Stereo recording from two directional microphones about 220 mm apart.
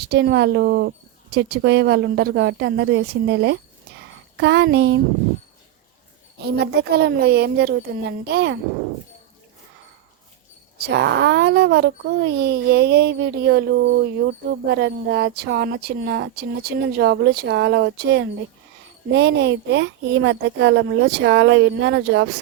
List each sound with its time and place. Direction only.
0.0 s speech: 45° right (ahead or behind)
6.4 s speech: 50° right (ahead or behind)
10.8 s a woman's voice: 50° right (ahead or behind)